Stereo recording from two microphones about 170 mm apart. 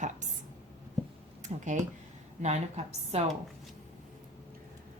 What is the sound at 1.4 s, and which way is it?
A woman's voice, 45° right (ahead or behind).